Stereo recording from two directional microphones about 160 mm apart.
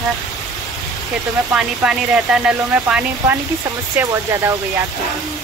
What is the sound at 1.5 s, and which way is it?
Speech, 5° right (ahead or behind).